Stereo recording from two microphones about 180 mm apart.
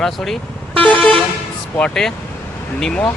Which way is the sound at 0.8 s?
5° left (ahead or behind).